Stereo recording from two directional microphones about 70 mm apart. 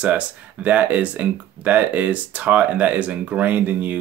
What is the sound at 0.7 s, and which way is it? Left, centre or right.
Speech, right.